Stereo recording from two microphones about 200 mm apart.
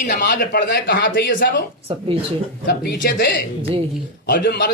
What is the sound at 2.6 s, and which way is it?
A man's voice, 55° left (ahead or behind).